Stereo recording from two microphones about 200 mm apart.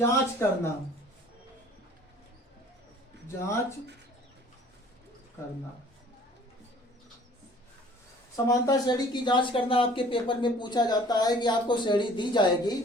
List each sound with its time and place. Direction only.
0.0 s speech: 15° left (ahead or behind)
3.4 s speech: 15° left (ahead or behind)
8.4 s speech: 20° left (ahead or behind)